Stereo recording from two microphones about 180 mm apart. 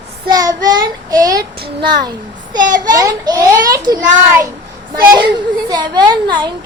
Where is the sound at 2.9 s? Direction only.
20° right (ahead or behind).